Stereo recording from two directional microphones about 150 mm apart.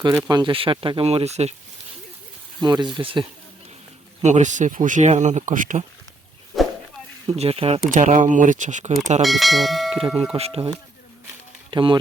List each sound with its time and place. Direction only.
0.3 s speech: 30° right (ahead or behind); by 1.5 s 45° right (ahead or behind)
2.6 s speech: 30° right (ahead or behind)
4.2 s speech: 55° right (ahead or behind)
7.3 s speech: 40° right (ahead or behind)
7.9 s speech: 55° right (ahead or behind)
9.2 s speech: centre (ahead or behind)
10.3 s speech: 40° right (ahead or behind)
11.7 s speech: 35° right (ahead or behind)